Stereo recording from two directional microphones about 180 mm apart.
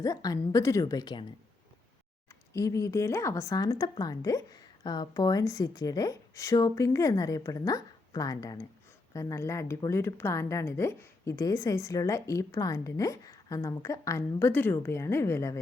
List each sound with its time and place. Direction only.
0.0 s speech: 20° left (ahead or behind)
2.5 s a woman's voice: 20° left (ahead or behind)